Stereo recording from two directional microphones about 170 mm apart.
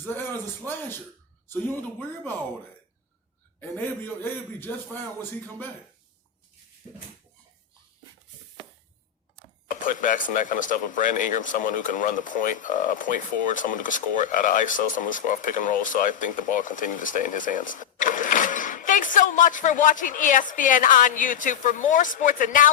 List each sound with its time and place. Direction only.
0.0 s a man's voice: 10° left (ahead or behind)
4.0 s a man's voice: 10° left (ahead or behind)
9.6 s speech: 50° left (ahead or behind)